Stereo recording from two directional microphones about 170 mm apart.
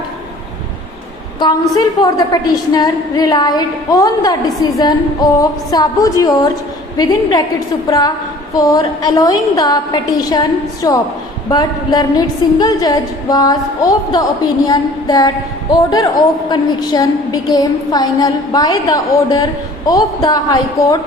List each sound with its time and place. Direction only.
1.4 s a woman's voice: 25° left (ahead or behind)